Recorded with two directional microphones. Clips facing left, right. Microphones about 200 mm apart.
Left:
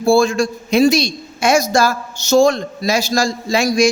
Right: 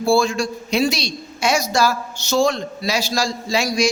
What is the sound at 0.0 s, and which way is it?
A man's voice, 50° left (ahead or behind).